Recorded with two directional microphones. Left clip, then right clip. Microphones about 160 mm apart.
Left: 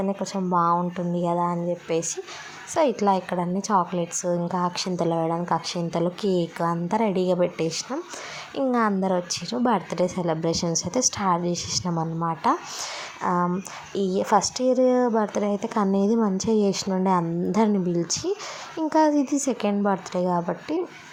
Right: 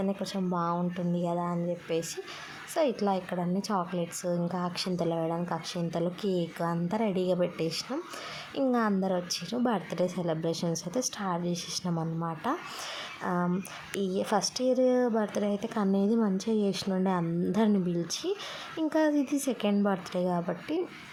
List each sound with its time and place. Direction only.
0.0 s a woman's voice: 10° left (ahead or behind)